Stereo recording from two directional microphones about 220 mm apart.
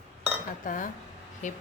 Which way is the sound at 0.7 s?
35° left (ahead or behind).